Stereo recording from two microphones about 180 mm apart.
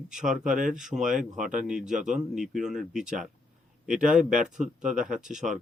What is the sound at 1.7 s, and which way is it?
Speech, 5° right (ahead or behind).